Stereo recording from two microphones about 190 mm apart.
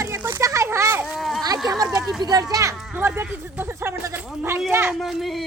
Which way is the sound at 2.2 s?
20° right (ahead or behind).